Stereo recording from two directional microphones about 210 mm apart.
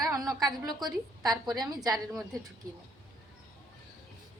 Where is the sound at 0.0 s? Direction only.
15° right (ahead or behind).